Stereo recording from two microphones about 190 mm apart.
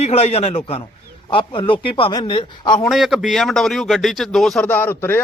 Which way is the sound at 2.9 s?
Centre (ahead or behind).